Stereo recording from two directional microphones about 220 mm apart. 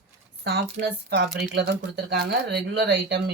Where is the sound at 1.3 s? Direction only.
45° right (ahead or behind).